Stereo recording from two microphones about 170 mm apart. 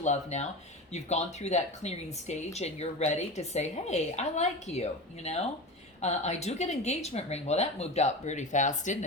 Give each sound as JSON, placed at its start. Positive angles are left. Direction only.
{"t": 0.0, "sound": "speech", "side_deg": 40}